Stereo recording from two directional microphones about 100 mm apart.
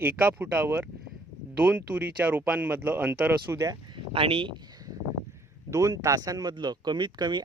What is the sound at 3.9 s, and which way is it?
Speech, 65° right (ahead or behind).